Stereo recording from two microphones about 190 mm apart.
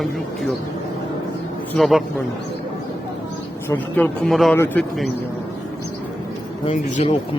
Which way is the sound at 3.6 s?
10° left (ahead or behind).